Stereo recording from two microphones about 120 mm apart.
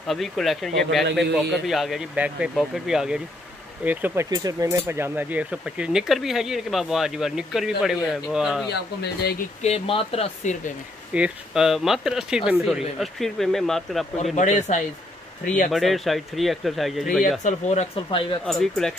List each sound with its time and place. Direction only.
0.0 s speech: centre (ahead or behind); by 4.3 s 15° right (ahead or behind)
4.3 s speech: 35° right (ahead or behind); by 8.6 s 5° right (ahead or behind)
9.6 s speech: 55° left (ahead or behind); by 10.7 s 80° left
11.1 s speech: 5° right (ahead or behind)
14.3 s speech: 80° left
15.7 s speech: centre (ahead or behind)
17.4 s speech: 80° left
17.9 s speech: 45° left (ahead or behind)
18.4 s speech: 5° left (ahead or behind)